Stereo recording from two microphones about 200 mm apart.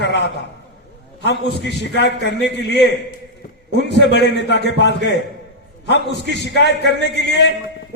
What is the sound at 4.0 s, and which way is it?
A man's voice, 60° left (ahead or behind).